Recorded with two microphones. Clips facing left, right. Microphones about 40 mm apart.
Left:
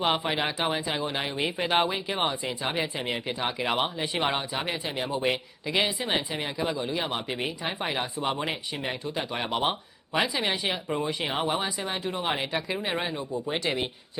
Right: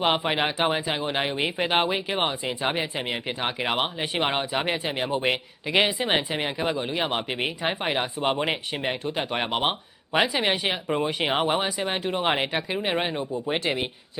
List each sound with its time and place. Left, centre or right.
0.0 s speech: right
13.7 s speech: centre